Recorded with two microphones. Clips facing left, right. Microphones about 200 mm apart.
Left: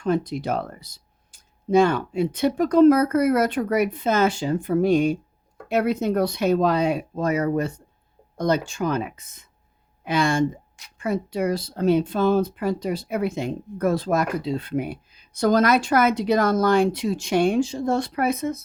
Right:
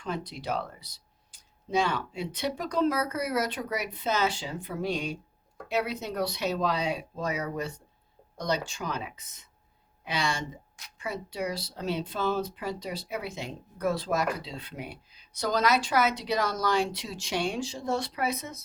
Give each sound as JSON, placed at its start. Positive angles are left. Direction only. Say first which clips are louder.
{"t": 0.0, "sound": "speech", "louder": "left 11 dB", "side_deg": 50}